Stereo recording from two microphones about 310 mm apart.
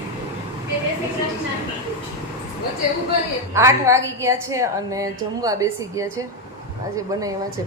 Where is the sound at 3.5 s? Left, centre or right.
Centre.